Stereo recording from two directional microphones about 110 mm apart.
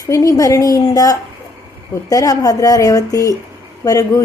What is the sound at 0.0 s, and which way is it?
Speech, 30° left (ahead or behind).